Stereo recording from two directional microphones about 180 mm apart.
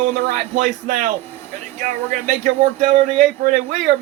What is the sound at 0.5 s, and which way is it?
Speech, 45° right (ahead or behind).